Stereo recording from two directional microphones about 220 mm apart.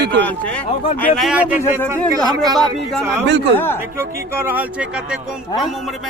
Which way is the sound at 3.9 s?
10° right (ahead or behind).